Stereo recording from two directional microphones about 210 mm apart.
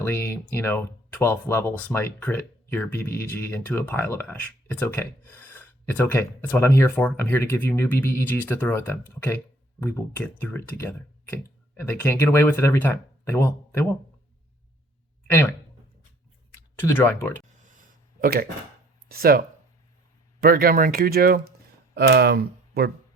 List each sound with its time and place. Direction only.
0.0 s speech: 10° left (ahead or behind)
15.3 s speech: 10° left (ahead or behind)
16.7 s speech: 10° left (ahead or behind)
17.7 s a sound: 40° right (ahead or behind)
19.0 s speech: 45° right (ahead or behind)
20.4 s speech: 45° right (ahead or behind)